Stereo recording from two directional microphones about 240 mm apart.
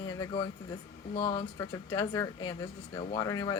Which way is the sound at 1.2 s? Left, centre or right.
Centre.